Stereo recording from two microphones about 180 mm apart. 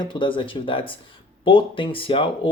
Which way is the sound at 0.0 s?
25° left (ahead or behind).